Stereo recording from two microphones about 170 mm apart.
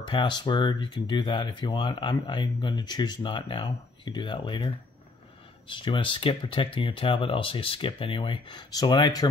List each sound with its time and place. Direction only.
0.0 s speech: 25° left (ahead or behind)